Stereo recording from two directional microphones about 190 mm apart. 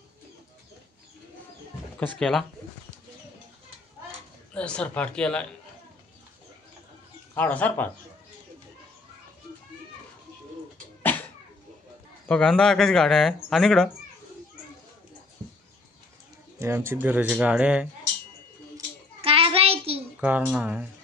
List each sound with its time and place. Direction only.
2.1 s speech: 5° left (ahead or behind)
4.6 s speech: 5° left (ahead or behind)
7.3 s speech: 10° left (ahead or behind)
11.0 s a sound: 10° left (ahead or behind)
12.3 s speech: 5° left (ahead or behind)
16.5 s speech: 15° right (ahead or behind)
19.2 s child singing: 30° right (ahead or behind)
20.2 s speech: 5° right (ahead or behind)